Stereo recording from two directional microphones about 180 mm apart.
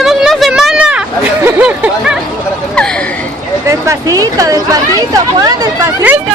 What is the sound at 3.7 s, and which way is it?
Speech, 15° right (ahead or behind).